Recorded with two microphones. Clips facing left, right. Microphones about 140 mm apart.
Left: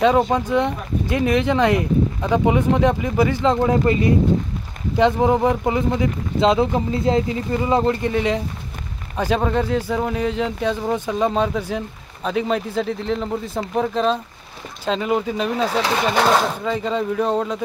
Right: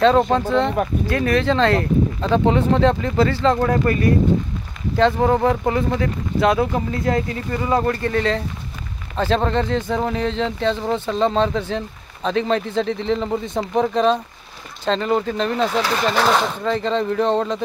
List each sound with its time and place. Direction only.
0.3 s speech: 15° left (ahead or behind)